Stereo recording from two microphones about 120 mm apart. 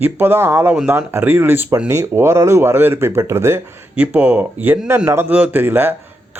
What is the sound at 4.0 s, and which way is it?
Speech, 15° right (ahead or behind).